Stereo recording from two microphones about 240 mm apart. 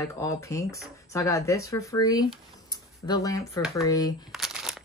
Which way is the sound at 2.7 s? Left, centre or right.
Centre.